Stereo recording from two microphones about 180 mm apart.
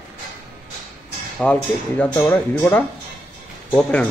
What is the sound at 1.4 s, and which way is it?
Speech, 5° left (ahead or behind).